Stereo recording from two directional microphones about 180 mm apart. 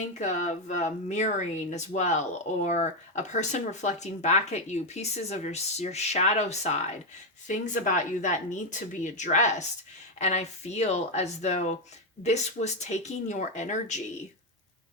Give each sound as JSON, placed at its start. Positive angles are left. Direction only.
{"t": 0.1, "sound": "speech", "side_deg": 40}